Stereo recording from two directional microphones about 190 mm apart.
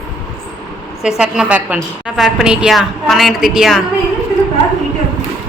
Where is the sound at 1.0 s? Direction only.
5° right (ahead or behind).